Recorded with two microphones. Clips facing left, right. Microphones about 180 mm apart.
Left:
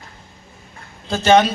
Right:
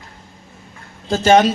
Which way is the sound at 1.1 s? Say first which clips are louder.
Right 1 dB; 45° right (ahead or behind).